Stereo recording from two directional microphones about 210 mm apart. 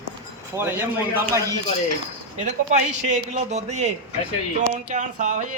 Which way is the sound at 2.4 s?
35° right (ahead or behind).